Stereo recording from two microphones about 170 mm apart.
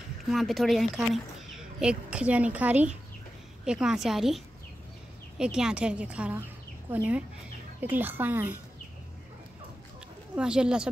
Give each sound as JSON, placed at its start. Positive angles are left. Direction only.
{"t": 0.3, "sound": "a woman's voice", "side_deg": 0}
{"t": 5.4, "sound": "a woman's voice", "side_deg": -5}
{"t": 10.3, "sound": "a woman's voice", "side_deg": -5}